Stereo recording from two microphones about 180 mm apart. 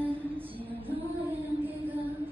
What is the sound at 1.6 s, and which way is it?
Music, 10° right (ahead or behind).